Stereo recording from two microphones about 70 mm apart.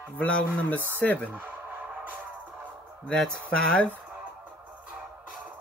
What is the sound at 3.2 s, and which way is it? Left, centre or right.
Speech, centre.